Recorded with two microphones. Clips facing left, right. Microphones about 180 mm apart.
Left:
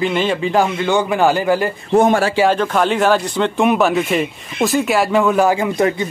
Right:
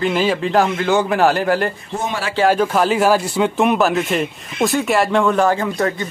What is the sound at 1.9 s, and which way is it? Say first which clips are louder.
Speech: left 13 dB; 50° left (ahead or behind).